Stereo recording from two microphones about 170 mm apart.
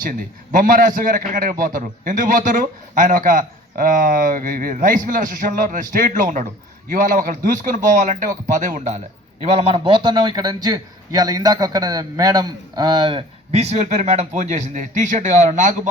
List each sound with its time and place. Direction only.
0.0 s a man's voice: 55° right (ahead or behind); by 13.2 s 25° right (ahead or behind)
13.5 s a man's voice: 40° right (ahead or behind)